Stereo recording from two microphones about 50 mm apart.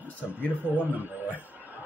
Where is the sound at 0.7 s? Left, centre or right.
Right.